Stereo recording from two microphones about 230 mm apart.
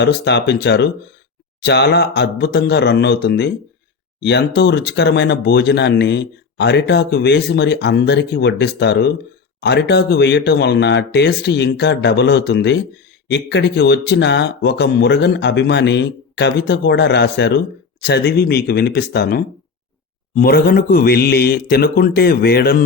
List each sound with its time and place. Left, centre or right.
0.0 s a man's voice: left